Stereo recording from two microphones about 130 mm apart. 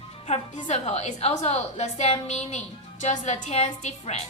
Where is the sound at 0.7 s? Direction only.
55° left (ahead or behind).